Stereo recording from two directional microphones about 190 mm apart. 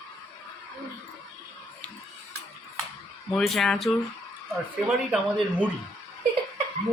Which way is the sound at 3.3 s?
Centre (ahead or behind).